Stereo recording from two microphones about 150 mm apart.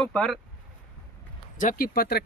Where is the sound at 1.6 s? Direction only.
70° left (ahead or behind); by 2.2 s 90° left.